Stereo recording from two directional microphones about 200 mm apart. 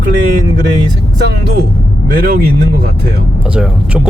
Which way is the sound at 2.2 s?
50° right (ahead or behind).